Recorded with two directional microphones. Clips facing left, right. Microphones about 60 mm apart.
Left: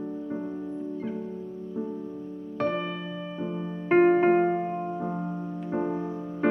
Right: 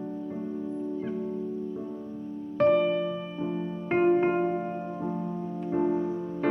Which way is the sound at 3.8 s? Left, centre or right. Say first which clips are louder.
Left 4 dB; left.